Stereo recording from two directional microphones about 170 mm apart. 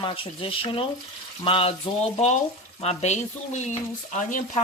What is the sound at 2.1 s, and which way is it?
Speech, 45° left (ahead or behind).